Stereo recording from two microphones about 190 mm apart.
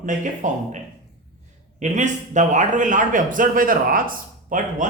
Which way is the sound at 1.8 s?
40° right (ahead or behind).